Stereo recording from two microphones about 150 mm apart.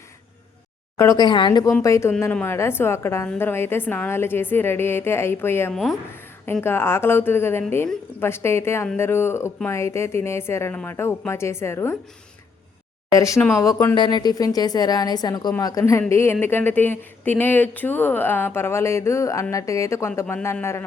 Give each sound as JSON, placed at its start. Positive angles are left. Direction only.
{"t": 0.9, "sound": "a woman's voice", "side_deg": 25}
{"t": 5.7, "sound": "speech", "side_deg": 0}
{"t": 6.4, "sound": "a woman's voice", "side_deg": 15}
{"t": 13.1, "sound": "a woman's voice", "side_deg": 20}
{"t": 13.9, "sound": "a woman's voice", "side_deg": 30}